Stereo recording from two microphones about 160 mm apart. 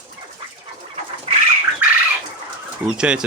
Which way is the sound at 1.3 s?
40° right (ahead or behind).